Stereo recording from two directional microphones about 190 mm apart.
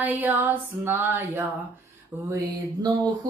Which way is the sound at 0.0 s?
10° right (ahead or behind).